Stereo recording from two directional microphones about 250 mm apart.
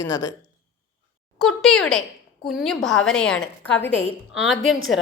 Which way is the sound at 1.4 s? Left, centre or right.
Centre.